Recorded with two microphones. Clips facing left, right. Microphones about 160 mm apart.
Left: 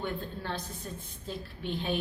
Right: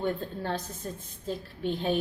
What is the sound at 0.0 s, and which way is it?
A woman's voice, 40° right (ahead or behind).